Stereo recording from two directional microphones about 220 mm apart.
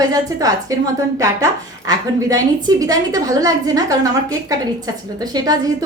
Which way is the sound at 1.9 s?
15° right (ahead or behind).